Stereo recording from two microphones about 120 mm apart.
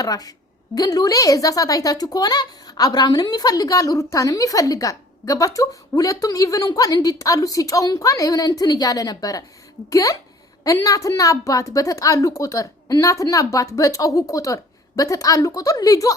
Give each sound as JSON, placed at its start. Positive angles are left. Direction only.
{"t": 0.0, "sound": "a woman's voice", "side_deg": 30}